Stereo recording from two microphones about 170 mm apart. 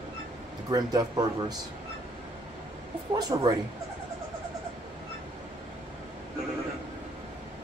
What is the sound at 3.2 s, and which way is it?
Speech, 25° right (ahead or behind).